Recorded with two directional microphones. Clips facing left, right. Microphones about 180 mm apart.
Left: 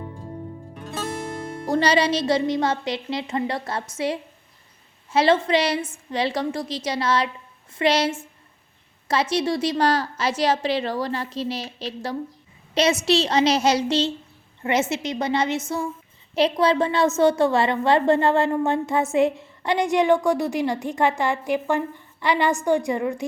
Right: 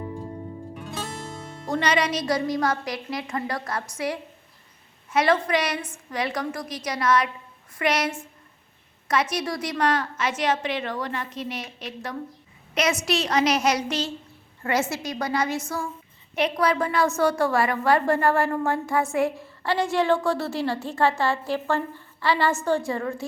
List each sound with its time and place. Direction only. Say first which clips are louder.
1.7 s a woman's voice: left 4 dB; 30° left (ahead or behind); by 23.2 s 15° left (ahead or behind)